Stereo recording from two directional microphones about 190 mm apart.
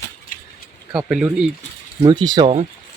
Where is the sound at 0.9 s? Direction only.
5° right (ahead or behind).